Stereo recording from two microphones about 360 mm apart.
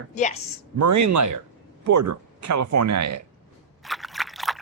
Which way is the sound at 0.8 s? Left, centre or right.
Right.